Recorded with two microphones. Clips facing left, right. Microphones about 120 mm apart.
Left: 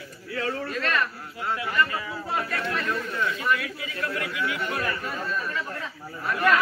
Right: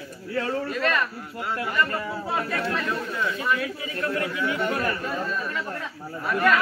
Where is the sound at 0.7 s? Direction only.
10° right (ahead or behind).